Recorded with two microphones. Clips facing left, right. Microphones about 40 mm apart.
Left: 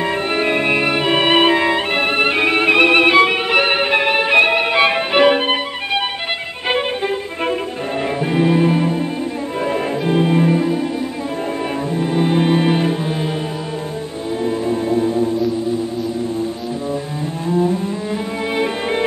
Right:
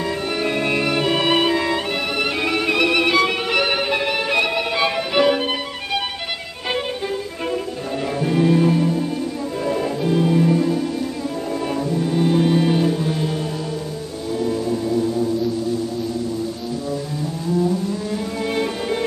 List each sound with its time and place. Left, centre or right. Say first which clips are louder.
0.0 s music: left 4 dB; left
8.2 s music: left 1 dB; left
11.9 s music: left 2 dB; left
14.4 s music: left 2 dB; left
17.5 s cello: left 3 dB; left